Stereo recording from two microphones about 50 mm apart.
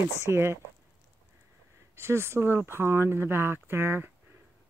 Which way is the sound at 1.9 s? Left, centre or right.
Right.